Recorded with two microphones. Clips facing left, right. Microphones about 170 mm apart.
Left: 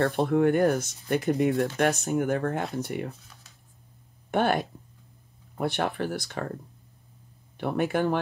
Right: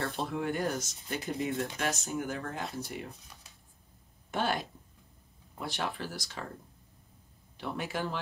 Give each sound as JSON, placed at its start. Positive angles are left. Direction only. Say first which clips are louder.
{"t": 0.0, "sound": "speech", "louder": "left 11 dB", "side_deg": 60}
{"t": 4.3, "sound": "speech", "louder": "left 7 dB", "side_deg": 60}
{"t": 7.5, "sound": "speech", "louder": "left 10 dB", "side_deg": 55}